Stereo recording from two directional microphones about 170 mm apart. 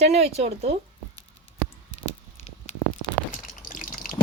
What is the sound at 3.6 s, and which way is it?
Water, 55° left (ahead or behind).